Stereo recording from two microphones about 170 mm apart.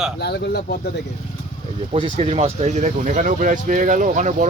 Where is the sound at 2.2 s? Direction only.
40° right (ahead or behind).